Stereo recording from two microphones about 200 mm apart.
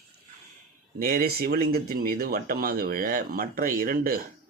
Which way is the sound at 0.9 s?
50° right (ahead or behind).